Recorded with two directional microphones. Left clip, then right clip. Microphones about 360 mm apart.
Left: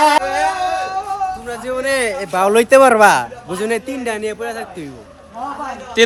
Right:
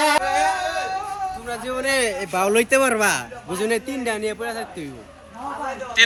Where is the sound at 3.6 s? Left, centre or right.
Centre.